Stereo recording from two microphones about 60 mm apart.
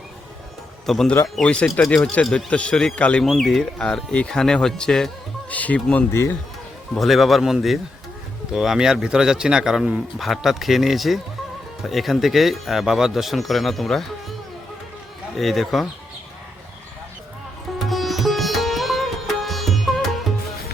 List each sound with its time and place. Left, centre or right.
0.9 s speech: centre
1.8 s speech: left
3.2 s speech: centre
5.5 s speech: left
6.1 s speech: left
6.9 s a man's voice: centre
15.4 s speech: centre
17.7 s sitar: centre